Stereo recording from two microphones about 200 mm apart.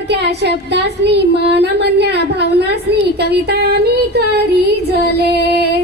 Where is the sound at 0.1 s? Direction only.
55° right (ahead or behind).